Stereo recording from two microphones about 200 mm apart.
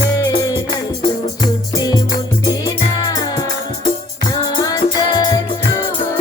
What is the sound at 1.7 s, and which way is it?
Music, 20° left (ahead or behind).